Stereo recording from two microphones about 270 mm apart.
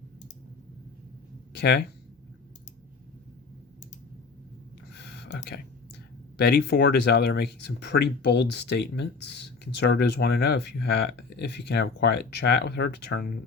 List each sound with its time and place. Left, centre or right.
1.5 s speech: left
4.9 s a sound: left
6.3 s speech: left